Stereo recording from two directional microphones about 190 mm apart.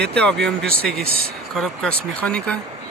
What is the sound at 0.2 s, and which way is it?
Speech, 5° left (ahead or behind).